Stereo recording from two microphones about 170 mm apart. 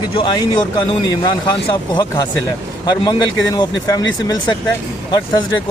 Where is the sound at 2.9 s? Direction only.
25° left (ahead or behind).